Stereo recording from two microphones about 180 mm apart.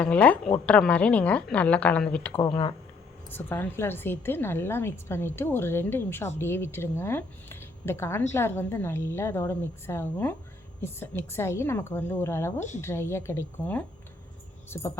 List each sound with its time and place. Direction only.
0.0 s a woman's voice: 5° left (ahead or behind)
12.5 s a woman's voice: 40° left (ahead or behind)
12.8 s a woman's voice: 15° left (ahead or behind)